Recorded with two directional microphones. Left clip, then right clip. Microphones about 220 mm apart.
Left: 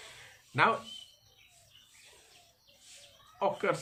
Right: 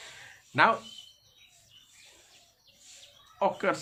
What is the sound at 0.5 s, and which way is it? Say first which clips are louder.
Speech: right 4 dB; 30° right (ahead or behind).